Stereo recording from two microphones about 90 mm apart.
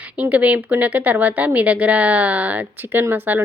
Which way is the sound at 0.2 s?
15° right (ahead or behind).